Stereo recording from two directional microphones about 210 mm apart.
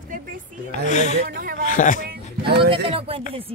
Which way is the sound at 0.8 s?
35° left (ahead or behind).